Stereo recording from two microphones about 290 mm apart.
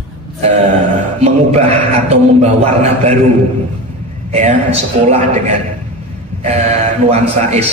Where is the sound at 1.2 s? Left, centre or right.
Right.